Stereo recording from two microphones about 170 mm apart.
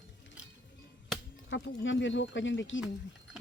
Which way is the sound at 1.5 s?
90° left.